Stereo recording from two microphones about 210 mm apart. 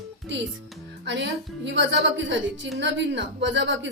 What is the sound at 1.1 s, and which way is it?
Speech, 60° right (ahead or behind).